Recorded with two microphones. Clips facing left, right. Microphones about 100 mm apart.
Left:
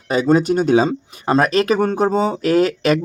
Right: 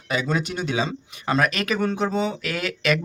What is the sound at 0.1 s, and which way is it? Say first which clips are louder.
Speech: left 10 dB; 40° left (ahead or behind).